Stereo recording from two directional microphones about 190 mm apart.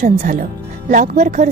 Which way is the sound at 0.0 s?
45° right (ahead or behind).